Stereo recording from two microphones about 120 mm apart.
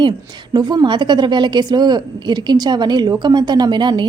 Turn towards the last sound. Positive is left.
turn(degrees=-40)  # may be behind; listen again after turning